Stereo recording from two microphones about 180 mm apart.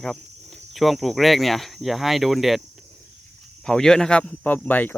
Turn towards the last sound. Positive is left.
turn(degrees=10)  # may be behind; listen again after turning